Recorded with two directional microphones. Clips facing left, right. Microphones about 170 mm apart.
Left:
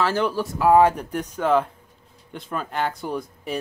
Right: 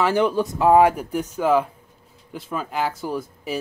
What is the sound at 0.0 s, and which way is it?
Speech, 15° right (ahead or behind).